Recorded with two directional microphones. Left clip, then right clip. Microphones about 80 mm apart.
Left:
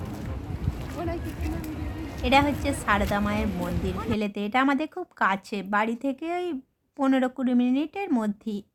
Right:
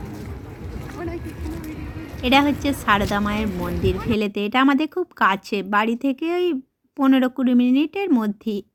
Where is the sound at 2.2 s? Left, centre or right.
Right.